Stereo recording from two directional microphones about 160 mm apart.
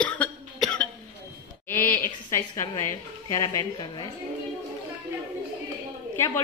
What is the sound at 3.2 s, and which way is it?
Speech, 20° left (ahead or behind).